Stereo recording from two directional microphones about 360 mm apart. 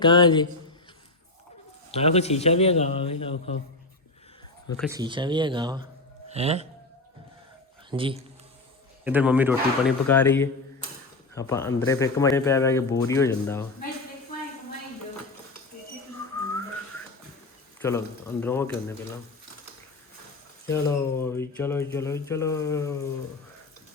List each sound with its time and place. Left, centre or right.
0.0 s speech: centre
1.9 s speech: centre
4.8 s speech: centre
7.9 s speech: centre
10.1 s speech: centre
17.8 s speech: centre
20.7 s speech: centre